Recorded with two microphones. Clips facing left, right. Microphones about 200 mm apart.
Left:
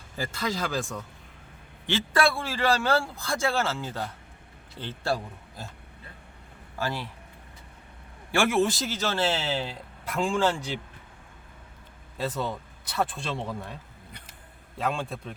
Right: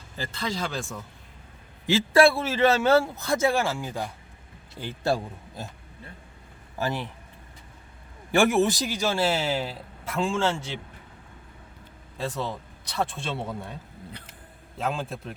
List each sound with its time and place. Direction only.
0.2 s a man's voice: 10° left (ahead or behind)
2.1 s speech: 25° right (ahead or behind)
6.7 s speech: 15° right (ahead or behind)
8.3 s speech: 15° right (ahead or behind); by 10.5 s centre (ahead or behind)
12.1 s a man's voice: centre (ahead or behind)
14.8 s a man's voice: centre (ahead or behind)